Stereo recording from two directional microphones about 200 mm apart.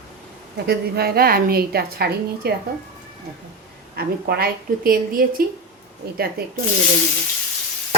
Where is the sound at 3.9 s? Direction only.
50° right (ahead or behind).